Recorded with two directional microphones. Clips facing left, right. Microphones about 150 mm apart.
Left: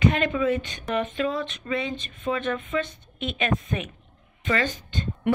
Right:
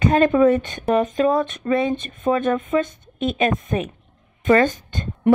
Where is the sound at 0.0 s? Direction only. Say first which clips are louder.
Right 8 dB; 40° right (ahead or behind).